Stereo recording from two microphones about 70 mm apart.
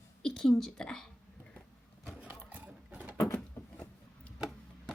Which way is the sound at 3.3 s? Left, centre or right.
Left.